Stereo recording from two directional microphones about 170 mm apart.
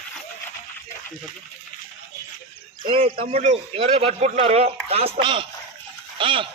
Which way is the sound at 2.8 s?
35° right (ahead or behind).